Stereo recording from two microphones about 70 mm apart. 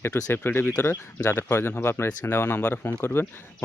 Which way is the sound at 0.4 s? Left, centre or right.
Left.